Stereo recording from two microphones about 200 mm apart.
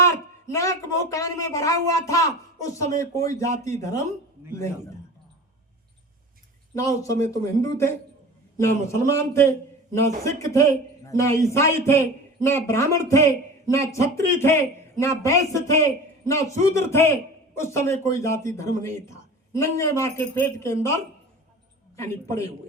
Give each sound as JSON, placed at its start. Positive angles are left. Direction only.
{"t": 0.0, "sound": "a man's voice", "side_deg": 15}
{"t": 6.7, "sound": "a man's voice", "side_deg": 15}
{"t": 21.9, "sound": "a man's voice", "side_deg": 15}